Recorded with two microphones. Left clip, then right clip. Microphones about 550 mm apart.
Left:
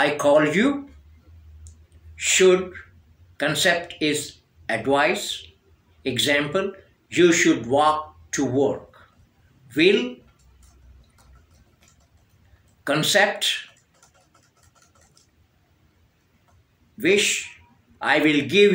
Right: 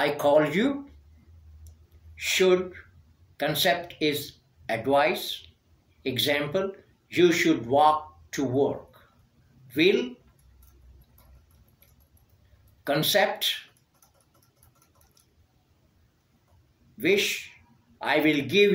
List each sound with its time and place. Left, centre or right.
0.0 s speech: right
2.1 s speech: right
12.8 s speech: right
17.0 s speech: right